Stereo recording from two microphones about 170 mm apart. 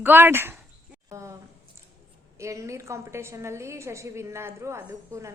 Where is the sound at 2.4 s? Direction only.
20° right (ahead or behind).